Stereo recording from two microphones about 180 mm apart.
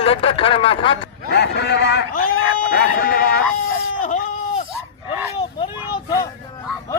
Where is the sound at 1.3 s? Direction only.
65° left (ahead or behind).